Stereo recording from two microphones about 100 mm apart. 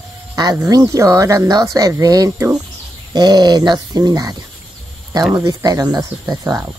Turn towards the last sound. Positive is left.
turn(degrees=-35)  # may be behind; listen again after turning